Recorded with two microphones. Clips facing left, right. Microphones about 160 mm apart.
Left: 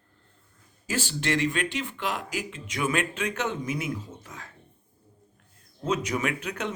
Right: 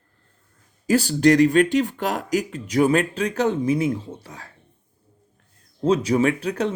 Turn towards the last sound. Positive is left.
turn(degrees=-35)  # may be behind; listen again after turning